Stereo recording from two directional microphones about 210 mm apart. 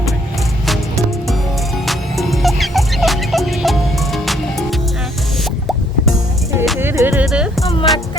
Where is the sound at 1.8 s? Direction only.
Centre (ahead or behind).